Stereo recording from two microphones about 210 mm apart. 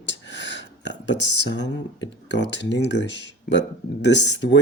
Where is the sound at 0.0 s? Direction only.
55° left (ahead or behind).